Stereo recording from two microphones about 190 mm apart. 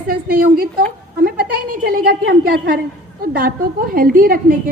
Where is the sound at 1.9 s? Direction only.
50° right (ahead or behind).